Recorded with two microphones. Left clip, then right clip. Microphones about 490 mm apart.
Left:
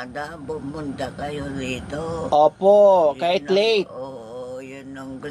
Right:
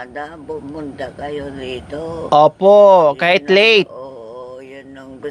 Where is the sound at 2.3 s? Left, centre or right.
Right.